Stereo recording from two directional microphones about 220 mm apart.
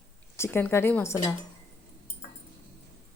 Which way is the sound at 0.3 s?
10° left (ahead or behind).